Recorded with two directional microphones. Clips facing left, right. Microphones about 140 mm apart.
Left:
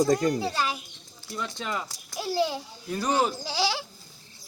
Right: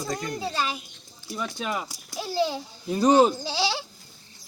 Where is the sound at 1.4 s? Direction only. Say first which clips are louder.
Right 2 dB; 10° right (ahead or behind).